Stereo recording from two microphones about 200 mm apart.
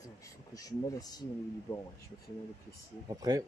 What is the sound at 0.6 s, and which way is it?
Speech, 15° left (ahead or behind).